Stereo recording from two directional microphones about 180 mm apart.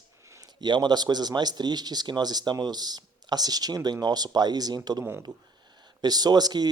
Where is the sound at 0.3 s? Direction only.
20° right (ahead or behind).